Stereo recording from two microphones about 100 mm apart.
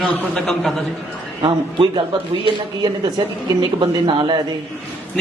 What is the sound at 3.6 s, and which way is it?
Speech, 55° right (ahead or behind).